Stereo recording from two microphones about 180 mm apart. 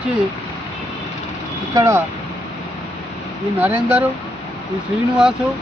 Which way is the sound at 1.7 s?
15° right (ahead or behind).